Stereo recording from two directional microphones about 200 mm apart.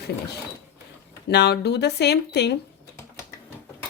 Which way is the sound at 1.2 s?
55° left (ahead or behind).